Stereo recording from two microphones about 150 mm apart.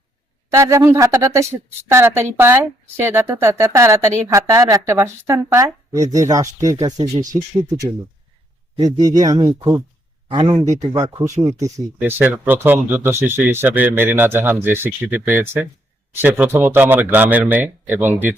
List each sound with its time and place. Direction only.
0.5 s speech: 20° right (ahead or behind)
8.8 s speech: 25° right (ahead or behind)